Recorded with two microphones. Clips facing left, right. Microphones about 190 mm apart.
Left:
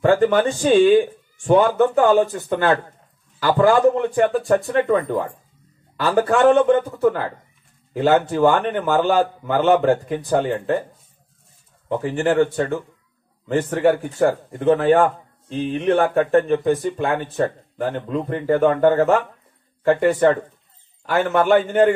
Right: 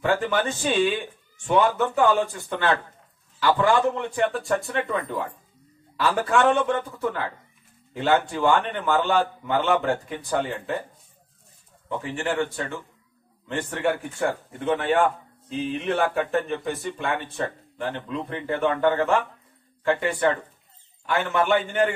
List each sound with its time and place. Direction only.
0.0 s a man's voice: 40° left (ahead or behind)
4.6 s speech: centre (ahead or behind)
4.8 s a man's voice: 45° left (ahead or behind)
11.9 s a man's voice: 40° left (ahead or behind)
15.5 s speech: centre (ahead or behind)
16.4 s speech: 40° left (ahead or behind)